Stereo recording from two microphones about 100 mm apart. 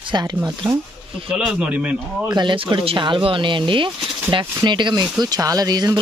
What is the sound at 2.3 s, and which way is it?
Speech, 50° right (ahead or behind).